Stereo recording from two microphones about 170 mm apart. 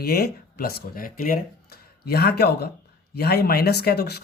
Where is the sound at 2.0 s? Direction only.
65° left (ahead or behind).